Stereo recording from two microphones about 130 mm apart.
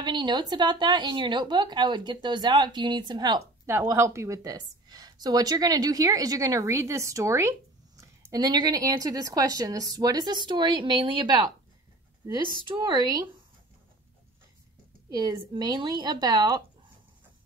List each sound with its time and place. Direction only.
0.0 s a woman's voice: 35° right (ahead or behind)
3.6 s a woman's voice: 20° right (ahead or behind); by 11.5 s 35° right (ahead or behind)
12.7 s a woman's voice: 35° right (ahead or behind)
15.0 s a woman's voice: 35° right (ahead or behind)